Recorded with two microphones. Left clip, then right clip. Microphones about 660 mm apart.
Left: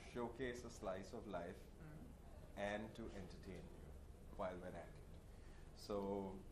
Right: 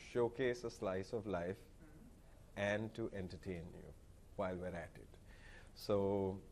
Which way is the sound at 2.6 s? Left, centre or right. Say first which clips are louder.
Right 7 dB; right.